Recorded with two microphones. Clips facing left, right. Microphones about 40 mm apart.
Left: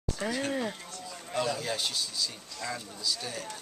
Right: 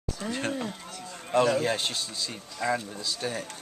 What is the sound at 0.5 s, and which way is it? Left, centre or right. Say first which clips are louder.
Speech: even; centre.